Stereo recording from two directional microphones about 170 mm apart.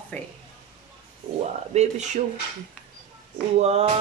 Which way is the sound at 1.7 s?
40° right (ahead or behind).